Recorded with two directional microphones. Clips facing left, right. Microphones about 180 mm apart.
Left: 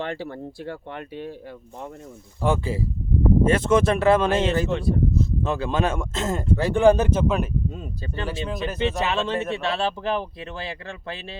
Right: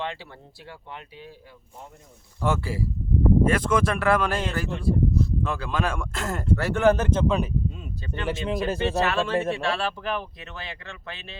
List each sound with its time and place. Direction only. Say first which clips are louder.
0.0 s speech: left 5 dB; 50° left (ahead or behind)
2.4 s speech: left 3 dB; 20° left (ahead or behind)
4.7 s speech: left 3 dB; 75° left (ahead or behind)
5.1 s speech: left 2 dB; 25° left (ahead or behind); by 7.5 s 5° left (ahead or behind)
7.7 s speech: left 2 dB; 40° left (ahead or behind)
8.3 s speech: right 4 dB; 25° right (ahead or behind)
9.0 s speech: right 1 dB; 20° left (ahead or behind)